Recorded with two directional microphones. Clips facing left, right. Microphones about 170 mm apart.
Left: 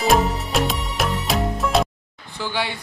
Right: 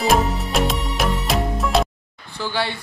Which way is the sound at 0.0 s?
Centre (ahead or behind).